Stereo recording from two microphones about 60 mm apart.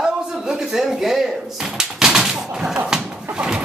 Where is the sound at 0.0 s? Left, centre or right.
Centre.